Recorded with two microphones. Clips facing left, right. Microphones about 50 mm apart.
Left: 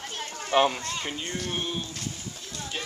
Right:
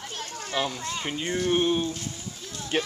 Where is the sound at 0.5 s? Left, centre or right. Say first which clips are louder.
Left 7 dB; left.